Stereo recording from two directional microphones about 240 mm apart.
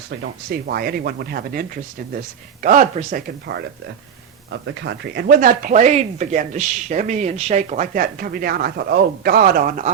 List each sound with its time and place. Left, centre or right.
0.2 s speech: right
4.6 s speech: right